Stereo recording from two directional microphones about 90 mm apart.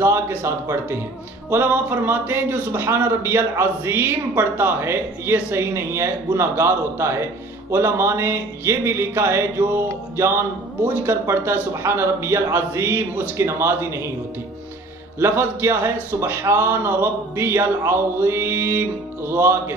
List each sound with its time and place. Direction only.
0.0 s speech: 25° right (ahead or behind)
15.1 s speech: 25° right (ahead or behind)